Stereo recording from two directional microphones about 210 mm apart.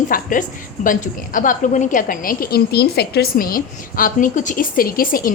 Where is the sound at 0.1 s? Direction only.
40° left (ahead or behind).